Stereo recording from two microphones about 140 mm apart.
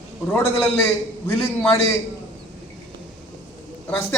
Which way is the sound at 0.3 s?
15° left (ahead or behind).